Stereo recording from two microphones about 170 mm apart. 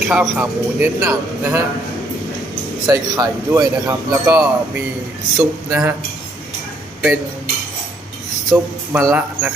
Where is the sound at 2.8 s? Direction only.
20° right (ahead or behind).